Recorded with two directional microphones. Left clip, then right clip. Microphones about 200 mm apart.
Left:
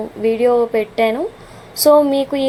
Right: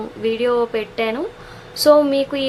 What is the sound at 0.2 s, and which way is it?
A woman's voice, 10° left (ahead or behind).